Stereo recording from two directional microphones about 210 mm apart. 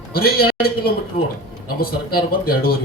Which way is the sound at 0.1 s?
45° left (ahead or behind).